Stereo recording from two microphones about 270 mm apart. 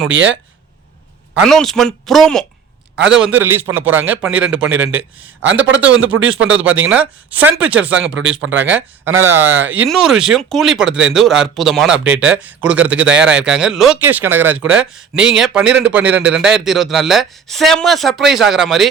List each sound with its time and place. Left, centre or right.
0.1 s a man's voice: right
1.4 s speech: centre
3.3 s speech: centre
5.4 s a man's voice: right
6.9 s speech: centre
7.9 s a man's voice: right
8.7 s speech: centre
9.3 s a man's voice: right
9.9 s speech: centre
10.8 s a man's voice: right
11.1 s speech: centre